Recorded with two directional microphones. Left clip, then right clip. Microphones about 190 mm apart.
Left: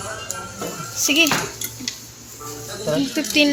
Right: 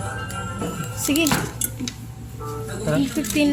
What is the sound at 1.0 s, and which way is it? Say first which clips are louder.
Music: left 5 dB; 10° right (ahead or behind).